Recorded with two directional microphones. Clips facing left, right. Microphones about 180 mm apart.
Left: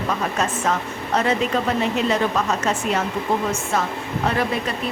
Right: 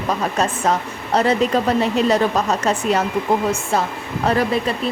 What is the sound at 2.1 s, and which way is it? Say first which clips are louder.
Speech: right 3 dB; 35° right (ahead or behind).